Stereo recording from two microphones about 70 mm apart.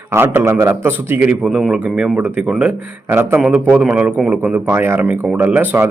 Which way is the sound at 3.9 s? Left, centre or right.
Right.